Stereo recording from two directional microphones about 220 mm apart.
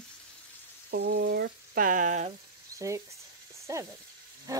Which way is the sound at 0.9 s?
50° right (ahead or behind).